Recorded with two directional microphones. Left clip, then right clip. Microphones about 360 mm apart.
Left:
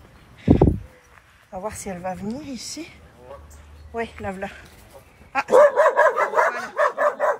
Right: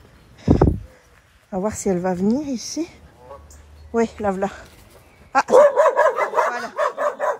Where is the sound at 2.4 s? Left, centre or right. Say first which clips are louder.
Right 7 dB; centre.